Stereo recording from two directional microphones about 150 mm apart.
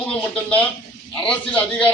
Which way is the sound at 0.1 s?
10° left (ahead or behind).